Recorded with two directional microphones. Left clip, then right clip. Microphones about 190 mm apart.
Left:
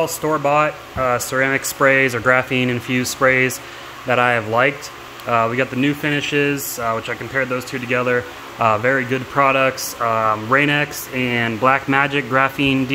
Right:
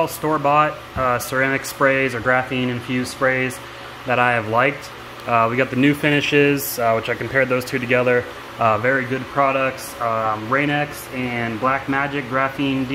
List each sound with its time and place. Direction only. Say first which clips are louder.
0.0 s speech: left 1 dB; 15° left (ahead or behind); by 3.5 s 35° left (ahead or behind)
4.1 s speech: left 1 dB; 25° left (ahead or behind)
5.8 s speech: right 2 dB; centre (ahead or behind)
8.5 s speech: left 1 dB; 20° left (ahead or behind)
9.3 s speech: left 3 dB; 45° left (ahead or behind)